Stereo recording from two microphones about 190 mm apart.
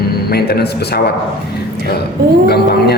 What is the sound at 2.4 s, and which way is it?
Speech, 55° left (ahead or behind).